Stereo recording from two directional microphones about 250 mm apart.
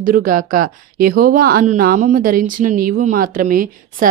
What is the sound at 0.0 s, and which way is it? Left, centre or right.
Speech, right.